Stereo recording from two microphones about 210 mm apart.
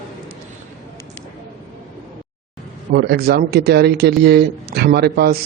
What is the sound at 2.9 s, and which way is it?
Speech, 50° right (ahead or behind).